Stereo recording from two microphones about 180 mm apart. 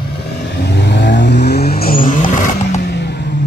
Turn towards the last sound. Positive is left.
turn(degrees=70)  # may be behind; listen again after turning